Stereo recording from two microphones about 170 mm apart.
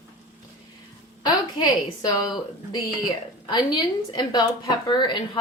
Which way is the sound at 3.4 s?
25° left (ahead or behind).